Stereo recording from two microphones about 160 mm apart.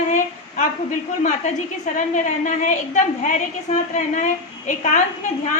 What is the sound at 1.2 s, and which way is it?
A woman's voice, 45° left (ahead or behind).